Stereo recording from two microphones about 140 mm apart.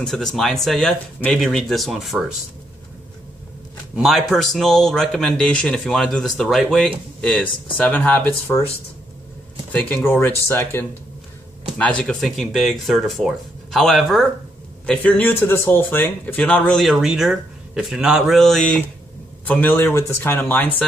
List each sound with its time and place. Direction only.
0.0 s speech: 5° left (ahead or behind)
3.9 s speech: centre (ahead or behind); by 8.6 s 15° left (ahead or behind)
9.7 s speech: 10° left (ahead or behind)
11.8 s speech: 5° left (ahead or behind)
14.9 s speech: 10° left (ahead or behind)